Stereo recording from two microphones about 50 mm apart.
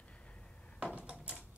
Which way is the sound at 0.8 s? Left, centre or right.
Right.